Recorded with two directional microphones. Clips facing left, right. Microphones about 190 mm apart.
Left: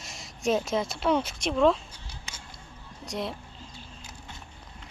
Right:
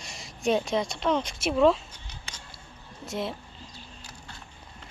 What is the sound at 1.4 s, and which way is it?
Speech, 5° right (ahead or behind).